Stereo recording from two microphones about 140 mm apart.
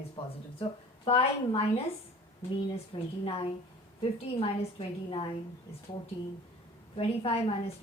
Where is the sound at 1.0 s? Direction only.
40° left (ahead or behind).